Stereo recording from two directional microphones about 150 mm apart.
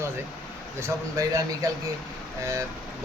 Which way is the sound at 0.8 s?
20° right (ahead or behind).